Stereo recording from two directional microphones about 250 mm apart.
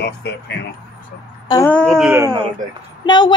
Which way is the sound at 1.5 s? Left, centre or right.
Centre.